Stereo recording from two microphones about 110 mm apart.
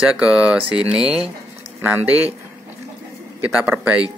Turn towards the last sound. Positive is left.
turn(degrees=-15)  # may be behind; listen again after turning